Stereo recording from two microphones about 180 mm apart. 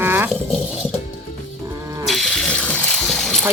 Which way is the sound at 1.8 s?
15° right (ahead or behind).